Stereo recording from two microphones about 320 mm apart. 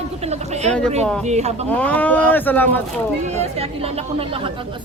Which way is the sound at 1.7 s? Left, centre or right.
Centre.